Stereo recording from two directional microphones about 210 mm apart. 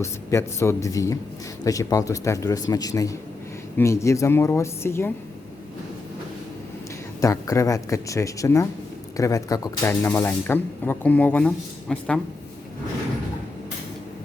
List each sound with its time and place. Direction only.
0.0 s speech: 15° left (ahead or behind)
7.2 s speech: 15° left (ahead or behind)